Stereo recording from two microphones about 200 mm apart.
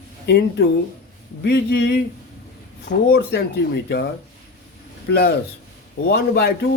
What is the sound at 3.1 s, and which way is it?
Speech, 55° left (ahead or behind).